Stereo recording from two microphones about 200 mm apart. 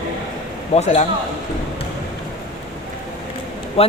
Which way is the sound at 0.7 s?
30° left (ahead or behind).